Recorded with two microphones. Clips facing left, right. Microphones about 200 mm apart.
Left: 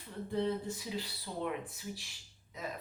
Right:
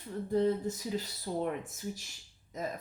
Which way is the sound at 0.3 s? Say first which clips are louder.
Right 5 dB; 40° right (ahead or behind).